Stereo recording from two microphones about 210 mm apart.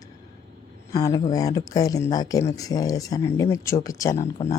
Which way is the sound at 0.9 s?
15° left (ahead or behind).